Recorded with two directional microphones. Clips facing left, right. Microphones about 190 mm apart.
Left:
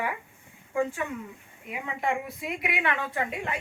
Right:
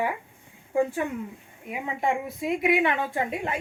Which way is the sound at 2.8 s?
25° right (ahead or behind).